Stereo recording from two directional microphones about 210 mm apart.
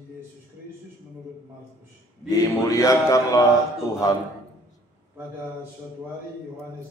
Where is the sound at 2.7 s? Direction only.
15° left (ahead or behind).